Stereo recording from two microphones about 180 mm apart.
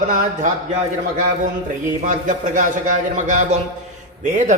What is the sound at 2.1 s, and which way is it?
A man's voice, 45° right (ahead or behind).